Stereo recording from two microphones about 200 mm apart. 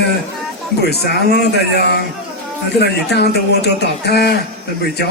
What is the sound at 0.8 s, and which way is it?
Speech, 55° left (ahead or behind).